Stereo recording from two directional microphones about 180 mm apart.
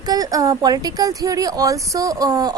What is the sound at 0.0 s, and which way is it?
Speech, 20° right (ahead or behind).